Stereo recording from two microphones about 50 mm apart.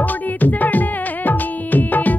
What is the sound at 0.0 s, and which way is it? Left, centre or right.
Music, left.